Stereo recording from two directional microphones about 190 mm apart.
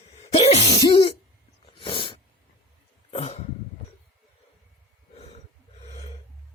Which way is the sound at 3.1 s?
35° left (ahead or behind).